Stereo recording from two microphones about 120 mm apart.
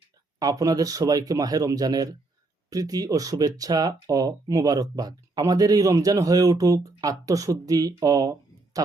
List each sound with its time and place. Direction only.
0.3 s speech: 30° right (ahead or behind)